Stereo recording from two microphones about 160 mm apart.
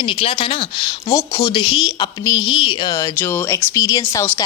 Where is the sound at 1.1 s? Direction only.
20° left (ahead or behind).